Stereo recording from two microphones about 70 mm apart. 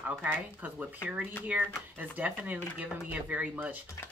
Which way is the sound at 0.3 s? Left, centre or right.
Right.